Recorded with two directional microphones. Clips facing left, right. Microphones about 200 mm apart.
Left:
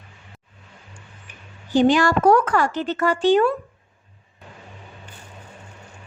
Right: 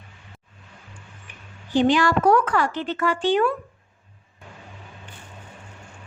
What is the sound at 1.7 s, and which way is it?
Speech, 45° left (ahead or behind).